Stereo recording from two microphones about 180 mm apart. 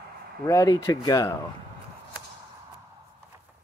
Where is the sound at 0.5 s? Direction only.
15° left (ahead or behind).